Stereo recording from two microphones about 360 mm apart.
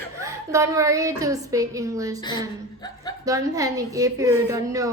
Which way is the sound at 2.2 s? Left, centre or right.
Centre.